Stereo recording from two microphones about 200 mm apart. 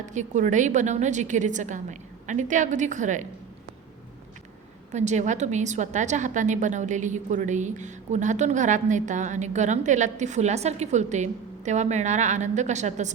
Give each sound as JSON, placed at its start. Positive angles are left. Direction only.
{"t": 0.0, "sound": "a woman's voice", "side_deg": -35}
{"t": 4.9, "sound": "a woman's voice", "side_deg": -35}